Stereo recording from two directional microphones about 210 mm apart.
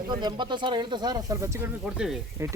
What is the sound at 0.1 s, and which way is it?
Speech, 20° right (ahead or behind).